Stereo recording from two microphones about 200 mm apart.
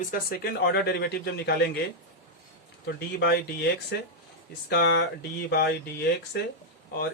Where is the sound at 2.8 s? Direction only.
55° left (ahead or behind).